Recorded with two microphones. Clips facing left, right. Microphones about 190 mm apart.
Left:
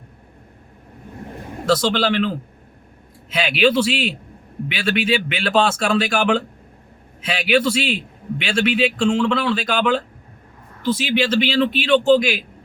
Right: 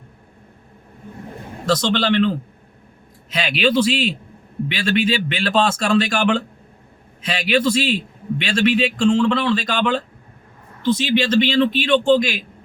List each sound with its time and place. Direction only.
1.6 s a man's voice: 5° left (ahead or behind)